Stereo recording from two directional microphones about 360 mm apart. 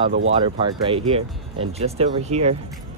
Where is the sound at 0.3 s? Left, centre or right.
Centre.